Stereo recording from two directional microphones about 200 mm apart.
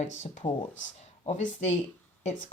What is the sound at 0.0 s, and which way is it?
Speech, 35° left (ahead or behind).